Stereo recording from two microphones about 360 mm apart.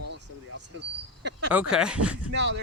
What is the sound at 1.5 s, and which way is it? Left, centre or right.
Speech, centre.